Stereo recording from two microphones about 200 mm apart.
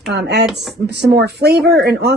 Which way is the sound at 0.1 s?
55° right (ahead or behind).